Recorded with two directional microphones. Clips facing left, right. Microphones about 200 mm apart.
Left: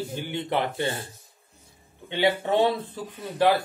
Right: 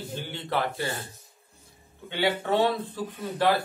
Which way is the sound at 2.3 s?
15° left (ahead or behind).